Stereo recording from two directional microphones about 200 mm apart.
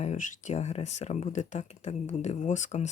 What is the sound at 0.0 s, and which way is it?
Speech, 35° left (ahead or behind).